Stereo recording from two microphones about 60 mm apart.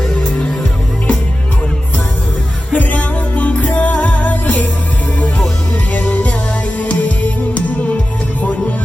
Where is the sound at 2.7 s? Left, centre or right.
Left.